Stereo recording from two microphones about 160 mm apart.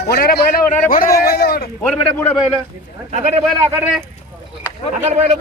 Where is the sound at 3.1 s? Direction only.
40° right (ahead or behind).